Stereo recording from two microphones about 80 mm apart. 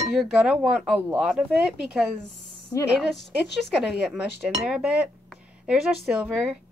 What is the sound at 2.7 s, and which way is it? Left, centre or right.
Speech, left.